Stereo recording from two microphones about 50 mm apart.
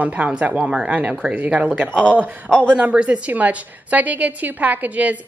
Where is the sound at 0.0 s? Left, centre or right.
Right.